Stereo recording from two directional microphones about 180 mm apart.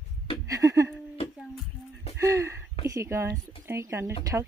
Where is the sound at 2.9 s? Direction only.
15° right (ahead or behind).